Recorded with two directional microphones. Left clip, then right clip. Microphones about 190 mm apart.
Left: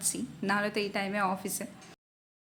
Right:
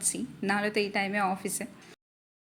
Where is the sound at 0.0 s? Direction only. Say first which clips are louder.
Right 2 dB; 10° right (ahead or behind).